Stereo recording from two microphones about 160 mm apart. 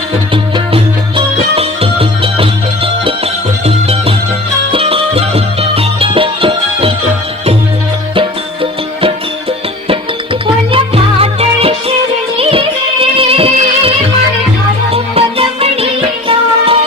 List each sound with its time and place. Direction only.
0.5 s music: 35° right (ahead or behind)
4.7 s music: 35° right (ahead or behind)
10.4 s music: 35° right (ahead or behind)
14.9 s music: 40° right (ahead or behind)